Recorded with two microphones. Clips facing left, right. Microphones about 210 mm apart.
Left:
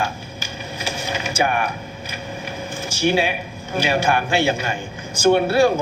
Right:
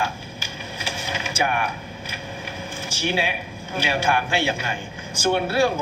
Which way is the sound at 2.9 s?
45° left (ahead or behind).